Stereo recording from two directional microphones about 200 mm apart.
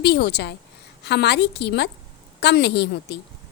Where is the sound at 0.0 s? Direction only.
55° left (ahead or behind).